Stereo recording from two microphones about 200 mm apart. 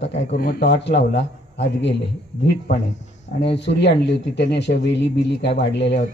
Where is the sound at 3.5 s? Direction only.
60° left (ahead or behind).